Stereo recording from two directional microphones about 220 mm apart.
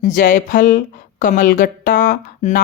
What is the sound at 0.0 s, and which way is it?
Speech, 35° left (ahead or behind).